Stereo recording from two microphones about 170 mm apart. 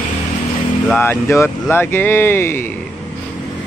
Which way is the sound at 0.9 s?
10° left (ahead or behind).